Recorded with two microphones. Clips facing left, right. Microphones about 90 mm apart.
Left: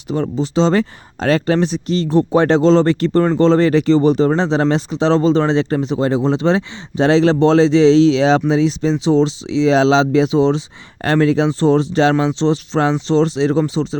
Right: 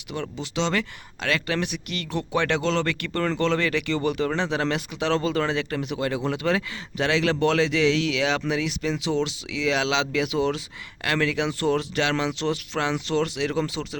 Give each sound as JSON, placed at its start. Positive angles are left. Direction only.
{"t": 0.1, "sound": "speech", "side_deg": 30}